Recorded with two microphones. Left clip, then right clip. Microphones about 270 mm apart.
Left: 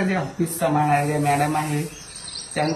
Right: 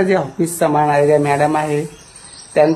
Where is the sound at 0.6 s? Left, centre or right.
Centre.